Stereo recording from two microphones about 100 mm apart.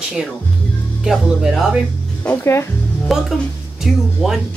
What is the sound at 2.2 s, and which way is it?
Speech, 25° left (ahead or behind).